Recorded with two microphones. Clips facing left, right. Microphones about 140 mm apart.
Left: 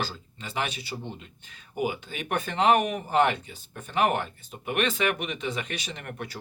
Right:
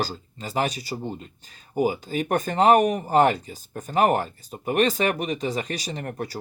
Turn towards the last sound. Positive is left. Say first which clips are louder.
# right 6 dB
turn(degrees=-35)  # may be behind; listen again after turning